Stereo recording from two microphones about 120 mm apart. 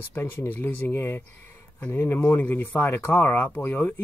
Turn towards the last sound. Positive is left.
turn(degrees=15)  # may be behind; listen again after turning